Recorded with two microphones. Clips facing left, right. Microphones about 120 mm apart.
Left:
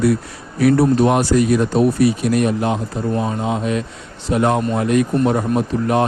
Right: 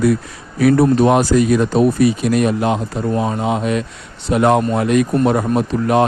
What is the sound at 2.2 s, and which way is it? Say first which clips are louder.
Speech: right 2 dB; 90° right.